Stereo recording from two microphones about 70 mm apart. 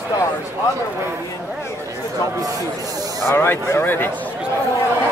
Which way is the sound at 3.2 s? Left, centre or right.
Left.